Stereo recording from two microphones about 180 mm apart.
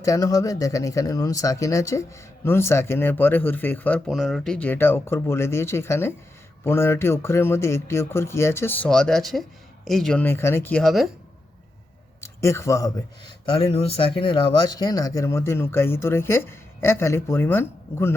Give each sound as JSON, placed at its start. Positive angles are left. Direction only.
{"t": 0.0, "sound": "speech", "side_deg": 20}
{"t": 12.2, "sound": "speech", "side_deg": 15}
{"t": 13.4, "sound": "speech", "side_deg": 30}